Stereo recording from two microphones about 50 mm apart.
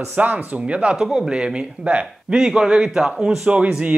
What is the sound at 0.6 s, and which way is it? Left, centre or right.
Speech, right.